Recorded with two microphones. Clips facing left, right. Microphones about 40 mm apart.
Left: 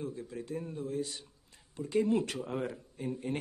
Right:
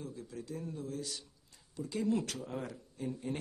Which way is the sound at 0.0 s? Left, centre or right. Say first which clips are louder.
Left 5 dB; left.